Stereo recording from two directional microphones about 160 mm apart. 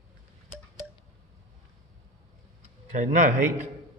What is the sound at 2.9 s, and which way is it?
Speech, 50° right (ahead or behind).